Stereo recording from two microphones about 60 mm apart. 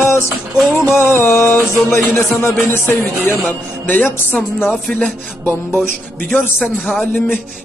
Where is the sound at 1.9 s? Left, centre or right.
Left.